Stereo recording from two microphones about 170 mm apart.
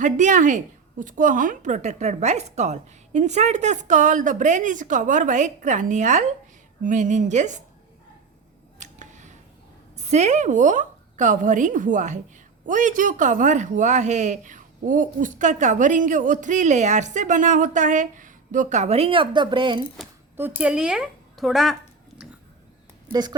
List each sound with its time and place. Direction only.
0.0 s speech: 45° right (ahead or behind)
8.8 s a sound: 45° right (ahead or behind)
10.0 s speech: 40° right (ahead or behind)
20.3 s a woman's voice: 10° right (ahead or behind)